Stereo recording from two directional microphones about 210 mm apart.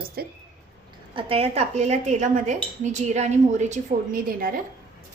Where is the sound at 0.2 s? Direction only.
45° right (ahead or behind).